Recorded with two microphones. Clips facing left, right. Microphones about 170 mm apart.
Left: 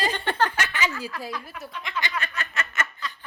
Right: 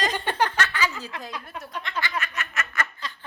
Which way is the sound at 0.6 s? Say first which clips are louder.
Right 1 dB; 20° left (ahead or behind).